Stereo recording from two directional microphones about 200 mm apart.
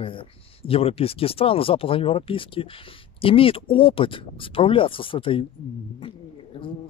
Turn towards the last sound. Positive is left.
turn(degrees=25)  # may be behind; listen again after turning